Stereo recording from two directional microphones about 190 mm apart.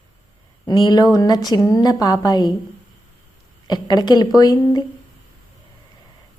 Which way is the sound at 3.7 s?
20° left (ahead or behind).